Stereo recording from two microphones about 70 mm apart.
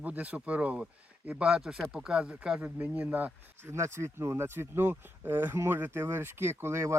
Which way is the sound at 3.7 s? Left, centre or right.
Right.